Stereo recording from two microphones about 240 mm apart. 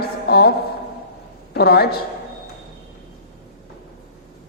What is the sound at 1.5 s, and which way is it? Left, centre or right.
Speech, left.